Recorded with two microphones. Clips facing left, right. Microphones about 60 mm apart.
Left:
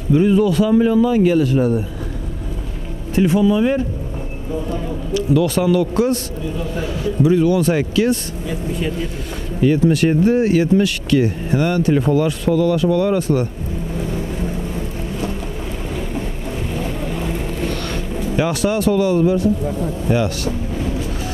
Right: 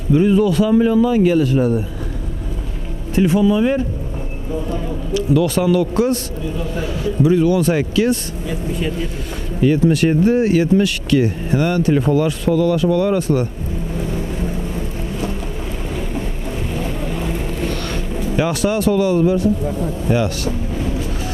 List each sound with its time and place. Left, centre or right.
0.1 s a man's voice: right
3.2 s a man's voice: centre
5.1 s speech: centre
13.9 s vehicle: centre
16.7 s vehicle: centre